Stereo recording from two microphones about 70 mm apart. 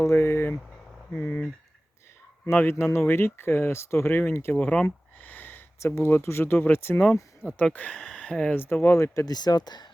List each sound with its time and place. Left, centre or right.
0.0 s vehicle: left
1.1 s speech: left
2.5 s speech: left
4.7 s a sound: centre
5.3 s a sound: left
5.8 s speech: left
7.4 s speech: left
8.1 s a sound: centre
8.5 s speech: left
9.2 s speech: left